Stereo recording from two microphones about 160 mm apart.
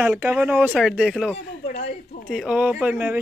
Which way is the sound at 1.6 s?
50° left (ahead or behind).